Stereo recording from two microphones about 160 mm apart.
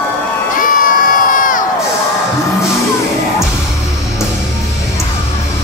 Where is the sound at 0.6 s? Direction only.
55° left (ahead or behind).